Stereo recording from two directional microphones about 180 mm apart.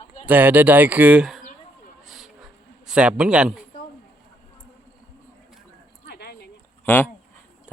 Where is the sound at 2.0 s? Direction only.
Centre (ahead or behind).